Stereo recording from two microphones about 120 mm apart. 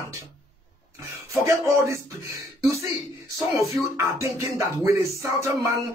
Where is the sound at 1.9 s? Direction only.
25° right (ahead or behind).